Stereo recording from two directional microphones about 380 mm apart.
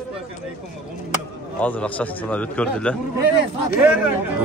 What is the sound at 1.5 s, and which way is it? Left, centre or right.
A man's voice, centre.